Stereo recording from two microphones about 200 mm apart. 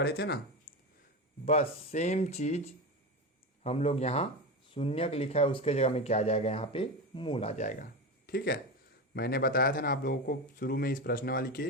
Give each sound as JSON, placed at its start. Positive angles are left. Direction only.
{"t": 0.0, "sound": "a man's voice", "side_deg": 55}
{"t": 1.5, "sound": "speech", "side_deg": 35}
{"t": 8.3, "sound": "a man's voice", "side_deg": 50}